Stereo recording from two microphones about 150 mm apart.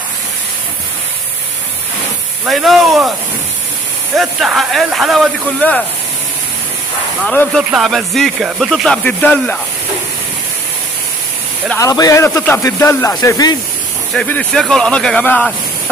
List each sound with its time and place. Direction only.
2.4 s speech: centre (ahead or behind)
4.2 s speech: centre (ahead or behind)
5.6 s speech: 10° left (ahead or behind)
7.2 s speech: 5° left (ahead or behind)
11.8 s speech: 25° left (ahead or behind)
14.1 s speech: 10° left (ahead or behind)